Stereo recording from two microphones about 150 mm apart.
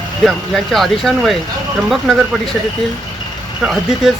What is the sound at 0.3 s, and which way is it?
Speech, centre (ahead or behind).